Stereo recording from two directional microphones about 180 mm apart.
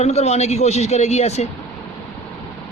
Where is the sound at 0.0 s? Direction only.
35° left (ahead or behind).